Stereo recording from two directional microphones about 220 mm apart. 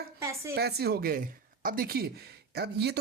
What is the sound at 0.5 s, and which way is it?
Speech, 45° right (ahead or behind).